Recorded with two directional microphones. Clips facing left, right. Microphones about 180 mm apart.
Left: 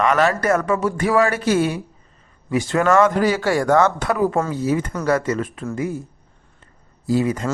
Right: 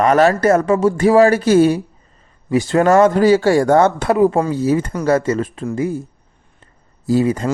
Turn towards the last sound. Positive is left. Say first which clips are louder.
# right 4 dB
turn(degrees=-35)  # may be behind; listen again after turning